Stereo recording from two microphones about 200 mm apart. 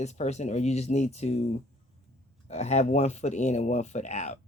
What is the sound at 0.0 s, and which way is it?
Speech, 35° left (ahead or behind).